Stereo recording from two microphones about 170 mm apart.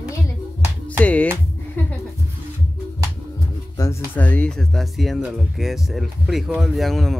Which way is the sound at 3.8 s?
20° left (ahead or behind).